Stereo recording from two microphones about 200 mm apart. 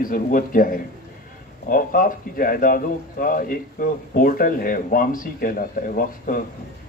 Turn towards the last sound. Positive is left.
turn(degrees=45)  # may be behind; listen again after turning